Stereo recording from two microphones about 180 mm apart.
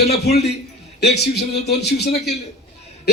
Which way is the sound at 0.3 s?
65° left (ahead or behind).